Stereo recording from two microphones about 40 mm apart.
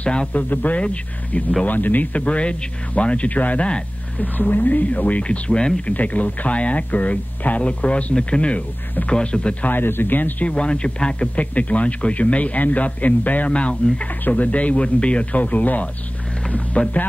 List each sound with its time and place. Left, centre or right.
0.0 s speech: left
0.4 s speech: left
1.7 s speech: left
2.1 s speech: left
5.2 s speech: left
5.9 s speech: left
9.7 s speech: left
10.5 s speech: left
11.3 s speech: left
13.5 s speech: left